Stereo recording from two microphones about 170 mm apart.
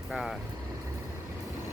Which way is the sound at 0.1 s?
Centre (ahead or behind).